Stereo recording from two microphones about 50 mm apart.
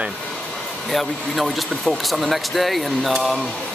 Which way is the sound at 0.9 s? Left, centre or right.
Centre.